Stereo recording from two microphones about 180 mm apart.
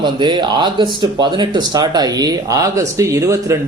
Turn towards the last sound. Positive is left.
turn(degrees=-15)  # may be behind; listen again after turning